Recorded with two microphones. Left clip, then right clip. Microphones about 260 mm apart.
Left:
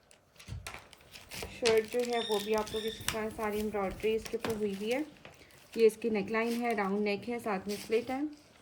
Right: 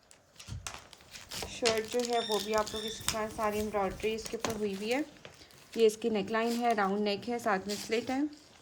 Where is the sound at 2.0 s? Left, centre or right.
Right; by 7.8 s centre.